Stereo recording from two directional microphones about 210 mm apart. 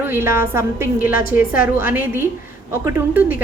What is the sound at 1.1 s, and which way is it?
Speech, 45° left (ahead or behind).